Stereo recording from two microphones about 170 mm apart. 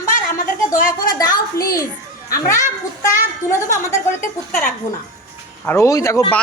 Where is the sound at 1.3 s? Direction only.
60° left (ahead or behind).